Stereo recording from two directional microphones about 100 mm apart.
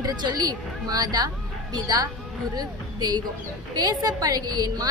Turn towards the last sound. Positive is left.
turn(degrees=-40)  # may be behind; listen again after turning